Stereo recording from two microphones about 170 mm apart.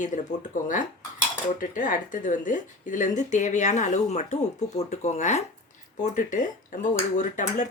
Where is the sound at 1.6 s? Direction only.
50° left (ahead or behind).